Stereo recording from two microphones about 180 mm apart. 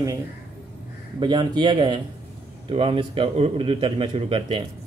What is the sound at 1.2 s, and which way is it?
A man's voice, 25° right (ahead or behind).